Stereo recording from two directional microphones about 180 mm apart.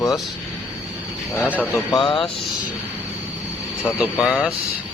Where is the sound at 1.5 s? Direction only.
10° left (ahead or behind).